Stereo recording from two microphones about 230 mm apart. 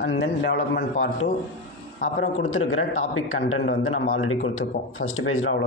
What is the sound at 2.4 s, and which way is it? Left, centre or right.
A man's voice, left.